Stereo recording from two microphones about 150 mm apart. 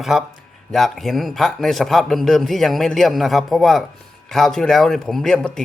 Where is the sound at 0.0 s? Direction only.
Centre (ahead or behind).